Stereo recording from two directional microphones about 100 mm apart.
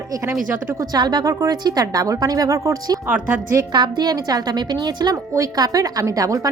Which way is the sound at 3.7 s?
45° right (ahead or behind).